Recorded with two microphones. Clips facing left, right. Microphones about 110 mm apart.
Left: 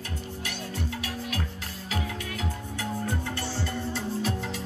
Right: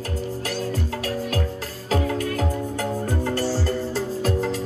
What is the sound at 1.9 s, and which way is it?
Music, 45° right (ahead or behind).